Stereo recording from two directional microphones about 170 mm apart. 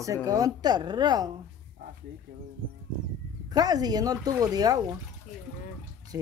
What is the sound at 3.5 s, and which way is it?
Speech, 25° right (ahead or behind).